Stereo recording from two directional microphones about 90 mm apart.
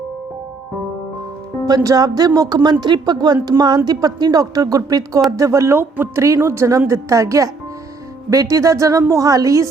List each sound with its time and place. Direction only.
1.6 s a woman's voice: 40° right (ahead or behind)